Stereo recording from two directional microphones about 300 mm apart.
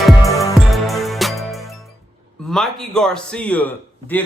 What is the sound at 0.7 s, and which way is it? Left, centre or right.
Music, centre.